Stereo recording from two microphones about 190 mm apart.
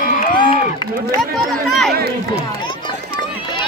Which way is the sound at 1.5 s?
Centre (ahead or behind).